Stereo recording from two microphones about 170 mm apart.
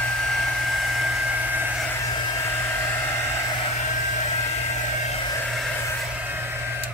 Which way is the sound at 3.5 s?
40° left (ahead or behind).